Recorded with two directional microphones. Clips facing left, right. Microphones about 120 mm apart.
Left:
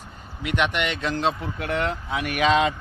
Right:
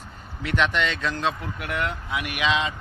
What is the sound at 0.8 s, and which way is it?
Speech, 20° left (ahead or behind).